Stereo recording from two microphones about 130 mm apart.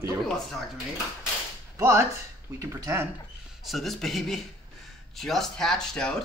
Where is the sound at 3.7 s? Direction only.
Centre (ahead or behind).